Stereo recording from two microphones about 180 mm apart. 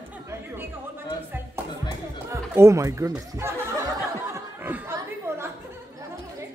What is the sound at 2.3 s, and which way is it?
Speech, 15° right (ahead or behind).